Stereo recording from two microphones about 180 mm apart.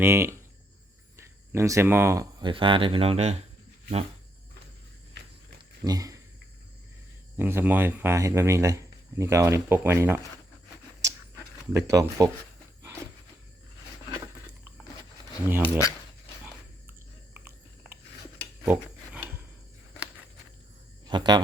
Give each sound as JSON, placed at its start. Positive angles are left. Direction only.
{"t": 0.0, "sound": "speech", "side_deg": -15}
{"t": 2.4, "sound": "speech", "side_deg": -30}
{"t": 5.8, "sound": "speech", "side_deg": -20}
{"t": 7.3, "sound": "speech", "side_deg": -10}
{"t": 11.7, "sound": "speech", "side_deg": -20}
{"t": 15.4, "sound": "speech", "side_deg": -10}
{"t": 18.6, "sound": "wild animals", "side_deg": -10}
{"t": 21.1, "sound": "speech", "side_deg": -25}